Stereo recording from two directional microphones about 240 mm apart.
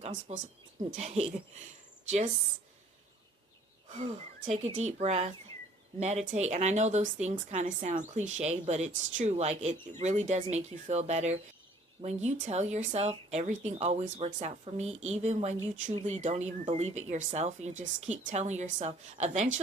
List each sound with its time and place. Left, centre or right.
0.3 s a woman's voice: right
3.8 s a woman's voice: right